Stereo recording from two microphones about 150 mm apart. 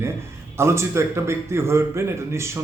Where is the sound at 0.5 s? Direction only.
20° right (ahead or behind).